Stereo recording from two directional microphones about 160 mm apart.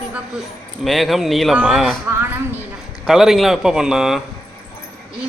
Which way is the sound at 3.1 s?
Centre (ahead or behind).